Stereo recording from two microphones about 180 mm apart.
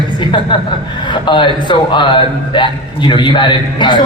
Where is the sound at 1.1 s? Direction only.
25° left (ahead or behind).